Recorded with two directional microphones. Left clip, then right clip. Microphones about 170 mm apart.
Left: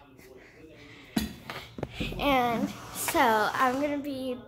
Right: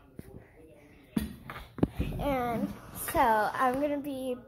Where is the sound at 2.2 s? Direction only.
15° left (ahead or behind).